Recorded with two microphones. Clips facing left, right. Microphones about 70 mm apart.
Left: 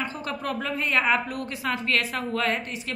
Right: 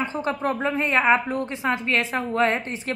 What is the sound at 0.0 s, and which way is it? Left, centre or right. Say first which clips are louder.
A woman's voice: right 6 dB; right.